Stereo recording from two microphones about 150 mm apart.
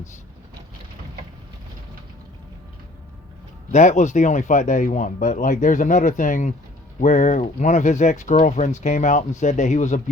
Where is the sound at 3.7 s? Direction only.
55° left (ahead or behind).